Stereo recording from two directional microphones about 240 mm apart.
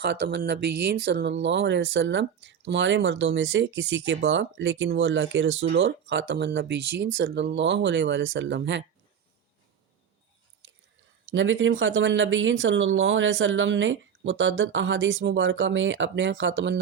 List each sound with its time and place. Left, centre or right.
0.0 s speech: right
11.3 s speech: right